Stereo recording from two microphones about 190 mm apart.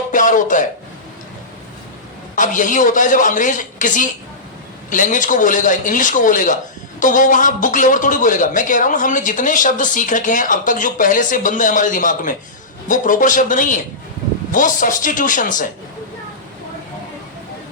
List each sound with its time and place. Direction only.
0.1 s speech: 45° left (ahead or behind)
2.3 s speech: 45° left (ahead or behind)